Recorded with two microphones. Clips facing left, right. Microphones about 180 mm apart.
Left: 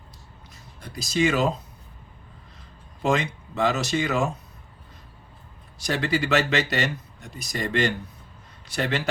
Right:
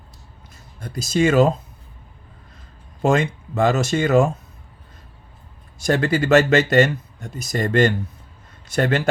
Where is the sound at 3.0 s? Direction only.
50° right (ahead or behind).